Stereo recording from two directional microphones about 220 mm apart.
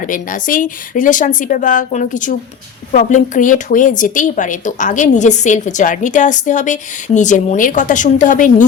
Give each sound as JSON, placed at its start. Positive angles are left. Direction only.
{"t": 0.1, "sound": "a woman's voice", "side_deg": 35}